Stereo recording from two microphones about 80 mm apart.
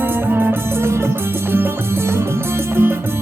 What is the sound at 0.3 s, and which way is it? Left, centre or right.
Music, right.